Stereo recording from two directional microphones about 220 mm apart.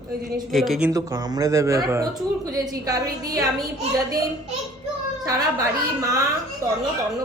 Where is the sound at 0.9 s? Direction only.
15° right (ahead or behind).